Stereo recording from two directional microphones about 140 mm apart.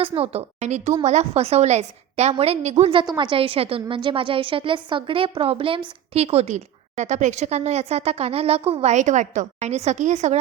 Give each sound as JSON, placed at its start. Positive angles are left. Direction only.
{"t": 0.2, "sound": "a woman's voice", "side_deg": -50}